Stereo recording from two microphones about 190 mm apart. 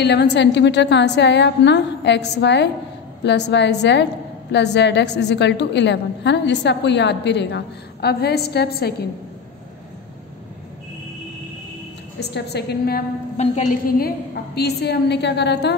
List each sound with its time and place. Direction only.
0.0 s a woman's voice: 60° left (ahead or behind)
12.2 s a woman's voice: 60° left (ahead or behind)
13.4 s a woman's voice: 40° left (ahead or behind)
13.9 s a woman's voice: 55° left (ahead or behind)